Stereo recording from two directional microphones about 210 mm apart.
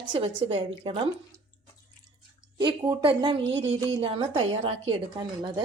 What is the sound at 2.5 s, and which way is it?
A woman's voice, 20° right (ahead or behind).